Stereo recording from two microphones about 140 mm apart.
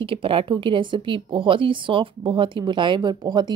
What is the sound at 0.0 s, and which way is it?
A woman's voice, 40° right (ahead or behind).